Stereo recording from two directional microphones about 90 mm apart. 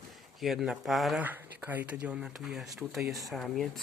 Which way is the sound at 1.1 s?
15° right (ahead or behind).